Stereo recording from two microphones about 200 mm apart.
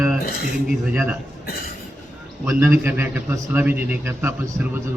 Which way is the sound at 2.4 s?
10° right (ahead or behind).